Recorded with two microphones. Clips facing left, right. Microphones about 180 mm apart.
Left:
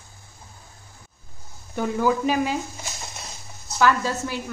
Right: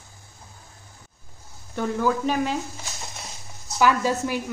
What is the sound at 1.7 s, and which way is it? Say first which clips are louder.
Speech: left 1 dB; 10° left (ahead or behind).